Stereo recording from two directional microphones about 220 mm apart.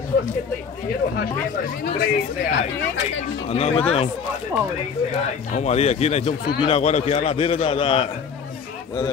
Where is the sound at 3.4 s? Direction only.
25° left (ahead or behind).